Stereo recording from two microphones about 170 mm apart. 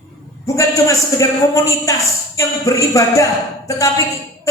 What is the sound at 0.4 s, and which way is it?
A man's voice, 20° left (ahead or behind).